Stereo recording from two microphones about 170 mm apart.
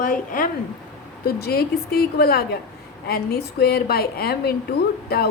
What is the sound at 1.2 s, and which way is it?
A woman's voice, 65° left (ahead or behind).